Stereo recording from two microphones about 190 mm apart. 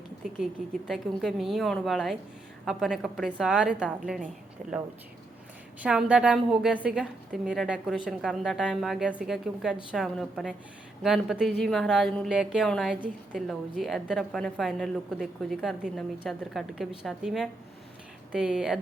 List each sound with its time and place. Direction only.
0.9 s a woman's voice: centre (ahead or behind)
5.8 s a woman's voice: 5° right (ahead or behind)